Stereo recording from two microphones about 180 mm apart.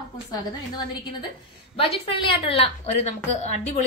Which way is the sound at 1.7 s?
30° left (ahead or behind).